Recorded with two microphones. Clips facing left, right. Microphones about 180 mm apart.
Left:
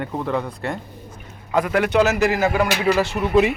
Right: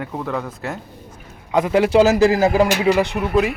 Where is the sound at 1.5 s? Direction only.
25° right (ahead or behind).